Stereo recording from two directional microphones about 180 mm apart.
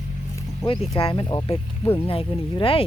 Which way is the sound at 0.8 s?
30° left (ahead or behind).